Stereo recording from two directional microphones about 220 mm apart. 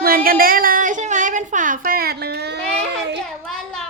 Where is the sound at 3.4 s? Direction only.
Centre (ahead or behind).